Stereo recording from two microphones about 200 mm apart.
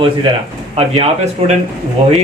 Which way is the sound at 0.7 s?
30° right (ahead or behind).